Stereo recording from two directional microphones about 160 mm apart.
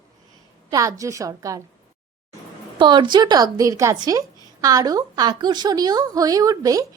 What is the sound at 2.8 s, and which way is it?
A woman's voice, 30° right (ahead or behind).